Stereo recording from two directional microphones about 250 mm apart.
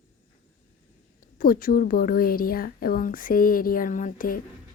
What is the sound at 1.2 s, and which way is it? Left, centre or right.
A woman's voice, left.